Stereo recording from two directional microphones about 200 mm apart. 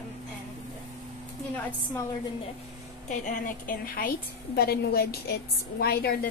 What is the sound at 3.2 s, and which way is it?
A woman's voice, 45° left (ahead or behind).